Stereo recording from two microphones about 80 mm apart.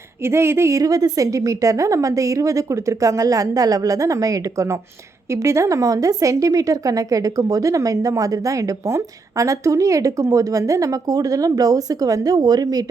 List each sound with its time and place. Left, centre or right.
0.3 s a woman's voice: right